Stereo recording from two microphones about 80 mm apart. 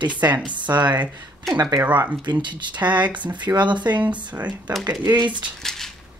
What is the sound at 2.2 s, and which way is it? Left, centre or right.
Speech, right.